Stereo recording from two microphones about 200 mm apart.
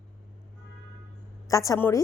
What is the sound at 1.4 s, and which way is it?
Speech, 15° left (ahead or behind).